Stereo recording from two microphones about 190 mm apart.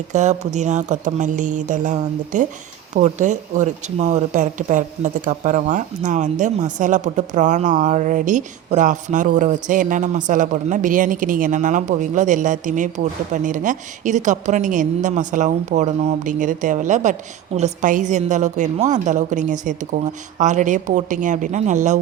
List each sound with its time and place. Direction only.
0.1 s speech: 40° right (ahead or behind)